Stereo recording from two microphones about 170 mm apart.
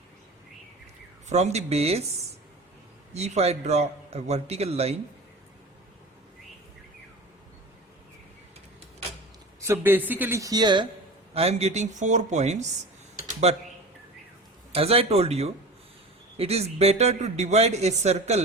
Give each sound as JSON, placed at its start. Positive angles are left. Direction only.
{"t": 1.3, "sound": "speech", "side_deg": -40}
{"t": 3.1, "sound": "speech", "side_deg": -40}
{"t": 9.6, "sound": "speech", "side_deg": -15}
{"t": 11.3, "sound": "speech", "side_deg": -40}
{"t": 14.7, "sound": "speech", "side_deg": -35}